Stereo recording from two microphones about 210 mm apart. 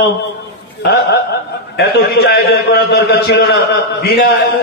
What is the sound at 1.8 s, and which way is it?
A man's voice, 50° left (ahead or behind).